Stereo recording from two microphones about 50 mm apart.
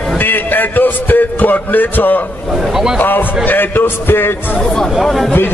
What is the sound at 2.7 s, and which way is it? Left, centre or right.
Speech, centre.